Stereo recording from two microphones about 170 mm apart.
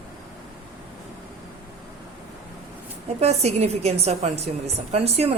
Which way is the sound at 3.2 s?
40° right (ahead or behind).